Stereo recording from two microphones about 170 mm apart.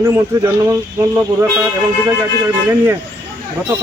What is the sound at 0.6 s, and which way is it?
Speech, 10° right (ahead or behind).